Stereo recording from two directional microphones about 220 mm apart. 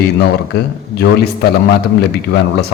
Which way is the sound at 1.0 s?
45° left (ahead or behind).